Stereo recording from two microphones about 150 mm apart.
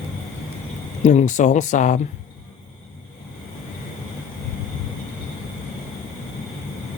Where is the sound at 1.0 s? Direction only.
55° left (ahead or behind).